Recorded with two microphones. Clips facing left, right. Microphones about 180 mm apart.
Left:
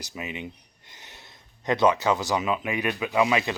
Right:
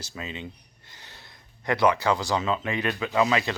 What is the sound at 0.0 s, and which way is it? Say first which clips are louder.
A man's voice: left 1 dB; 15° left (ahead or behind).